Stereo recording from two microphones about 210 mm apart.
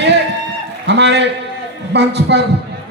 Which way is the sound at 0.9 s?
55° right (ahead or behind).